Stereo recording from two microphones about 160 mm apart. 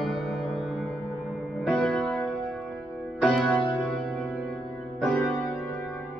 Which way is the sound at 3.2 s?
Centre (ahead or behind).